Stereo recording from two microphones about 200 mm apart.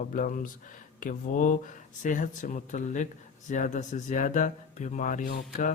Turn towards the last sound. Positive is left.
turn(degrees=40)  # may be behind; listen again after turning